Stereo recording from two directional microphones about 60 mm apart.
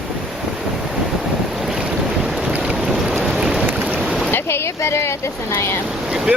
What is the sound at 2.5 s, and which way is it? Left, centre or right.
Boat, right.